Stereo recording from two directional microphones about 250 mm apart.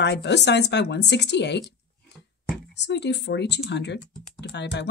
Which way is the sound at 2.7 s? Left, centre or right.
Left.